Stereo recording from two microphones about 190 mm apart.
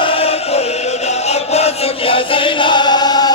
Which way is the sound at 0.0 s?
30° left (ahead or behind).